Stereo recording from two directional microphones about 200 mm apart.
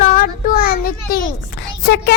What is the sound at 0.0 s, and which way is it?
Child singing, 45° left (ahead or behind).